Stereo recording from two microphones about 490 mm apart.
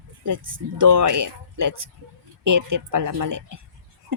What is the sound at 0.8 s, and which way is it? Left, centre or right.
A woman's voice, right.